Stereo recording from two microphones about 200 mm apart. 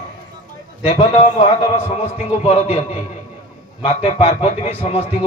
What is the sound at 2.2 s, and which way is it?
A man's voice, 35° left (ahead or behind).